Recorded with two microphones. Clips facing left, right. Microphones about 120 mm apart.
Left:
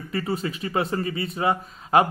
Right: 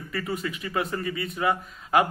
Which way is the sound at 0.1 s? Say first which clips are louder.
Left 3 dB; 30° left (ahead or behind).